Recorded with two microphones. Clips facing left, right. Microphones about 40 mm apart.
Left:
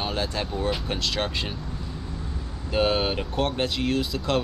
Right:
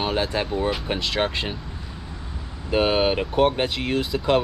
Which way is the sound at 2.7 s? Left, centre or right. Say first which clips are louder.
Right 3 dB; centre.